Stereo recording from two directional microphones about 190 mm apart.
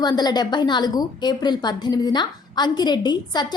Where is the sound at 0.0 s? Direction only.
20° left (ahead or behind).